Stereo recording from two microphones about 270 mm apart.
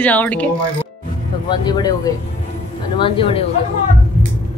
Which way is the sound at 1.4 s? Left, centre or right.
Centre.